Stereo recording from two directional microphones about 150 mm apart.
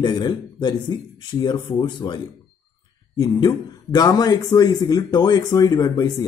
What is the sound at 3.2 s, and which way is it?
Speech, 25° left (ahead or behind).